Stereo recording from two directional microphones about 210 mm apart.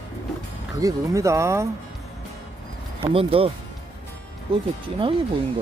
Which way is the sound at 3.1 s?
25° right (ahead or behind).